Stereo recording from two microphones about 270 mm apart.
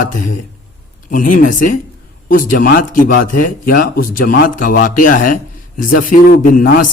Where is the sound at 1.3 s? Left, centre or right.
Left.